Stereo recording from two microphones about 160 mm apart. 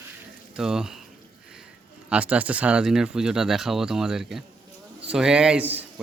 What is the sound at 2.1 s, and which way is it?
Speech, 10° right (ahead or behind).